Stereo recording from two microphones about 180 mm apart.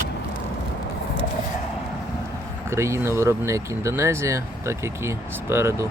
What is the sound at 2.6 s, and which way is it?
Speech, 15° right (ahead or behind).